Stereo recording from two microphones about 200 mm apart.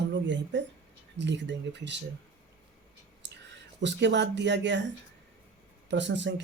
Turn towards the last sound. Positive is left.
turn(degrees=-65)  # may be behind; listen again after turning